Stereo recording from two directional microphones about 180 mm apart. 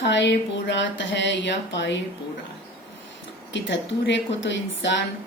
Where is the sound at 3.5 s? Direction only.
85° left.